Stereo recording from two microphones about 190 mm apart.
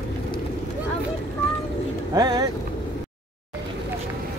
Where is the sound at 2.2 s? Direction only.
20° right (ahead or behind).